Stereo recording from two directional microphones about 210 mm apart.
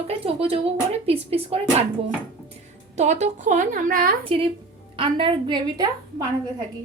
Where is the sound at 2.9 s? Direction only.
35° right (ahead or behind).